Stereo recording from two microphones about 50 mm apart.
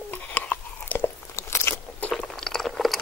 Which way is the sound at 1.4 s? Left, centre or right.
Left.